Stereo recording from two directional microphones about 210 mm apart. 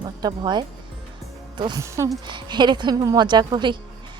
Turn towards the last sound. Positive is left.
turn(degrees=-20)  # may be behind; listen again after turning